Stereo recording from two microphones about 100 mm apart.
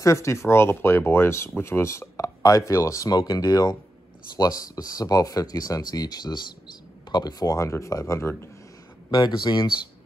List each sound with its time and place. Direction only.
0.0 s speech: 30° left (ahead or behind)
9.1 s speech: 50° left (ahead or behind)